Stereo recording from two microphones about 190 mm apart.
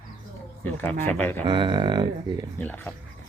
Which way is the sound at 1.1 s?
10° left (ahead or behind).